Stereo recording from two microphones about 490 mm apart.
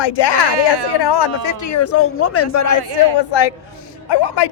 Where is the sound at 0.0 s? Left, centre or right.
Left.